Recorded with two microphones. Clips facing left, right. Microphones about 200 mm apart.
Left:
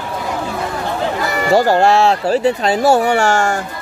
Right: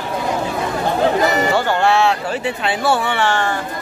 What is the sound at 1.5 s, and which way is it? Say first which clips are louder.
Speech: left 4 dB; 40° left (ahead or behind).